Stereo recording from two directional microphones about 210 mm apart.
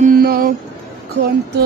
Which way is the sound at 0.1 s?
45° right (ahead or behind).